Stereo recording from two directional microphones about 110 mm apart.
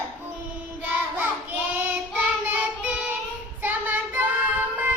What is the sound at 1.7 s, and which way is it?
Child singing, 15° right (ahead or behind).